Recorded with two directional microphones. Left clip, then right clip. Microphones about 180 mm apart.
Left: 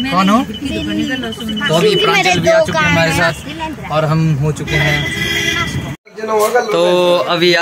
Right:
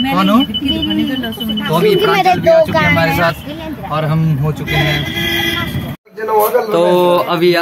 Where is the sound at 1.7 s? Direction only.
Centre (ahead or behind).